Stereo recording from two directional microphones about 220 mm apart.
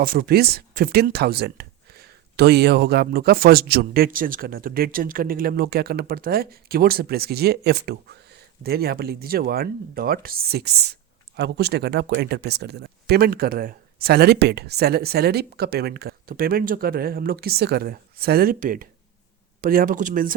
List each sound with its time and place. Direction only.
0.0 s speech: 40° right (ahead or behind)